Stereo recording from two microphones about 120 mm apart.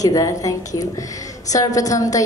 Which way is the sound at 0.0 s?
30° left (ahead or behind).